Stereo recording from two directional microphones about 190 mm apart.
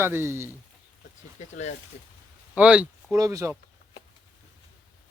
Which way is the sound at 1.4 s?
35° left (ahead or behind).